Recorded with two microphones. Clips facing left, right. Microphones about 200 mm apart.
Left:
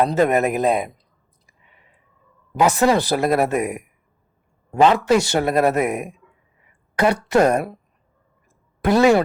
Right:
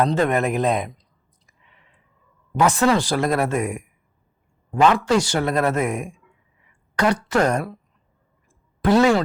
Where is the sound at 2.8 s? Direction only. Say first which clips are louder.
Left 2 dB; 15° left (ahead or behind).